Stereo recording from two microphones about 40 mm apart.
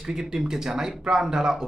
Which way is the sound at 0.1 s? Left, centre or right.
Centre.